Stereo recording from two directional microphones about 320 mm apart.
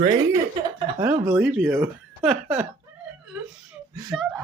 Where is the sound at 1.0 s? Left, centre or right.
Centre.